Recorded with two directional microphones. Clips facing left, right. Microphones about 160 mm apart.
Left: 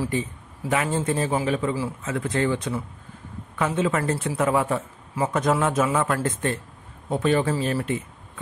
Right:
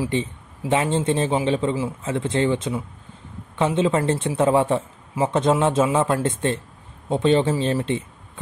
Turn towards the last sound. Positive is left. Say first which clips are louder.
# right 3 dB
turn(degrees=-25)  # may be behind; listen again after turning